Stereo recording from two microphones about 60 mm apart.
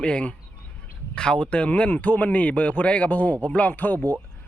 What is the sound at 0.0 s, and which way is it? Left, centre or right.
Speech, centre.